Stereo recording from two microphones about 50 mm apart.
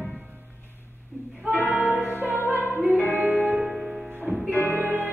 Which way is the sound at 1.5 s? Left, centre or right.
Right.